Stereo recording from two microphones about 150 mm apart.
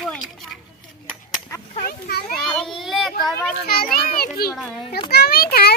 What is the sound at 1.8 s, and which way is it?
Speech, 85° left.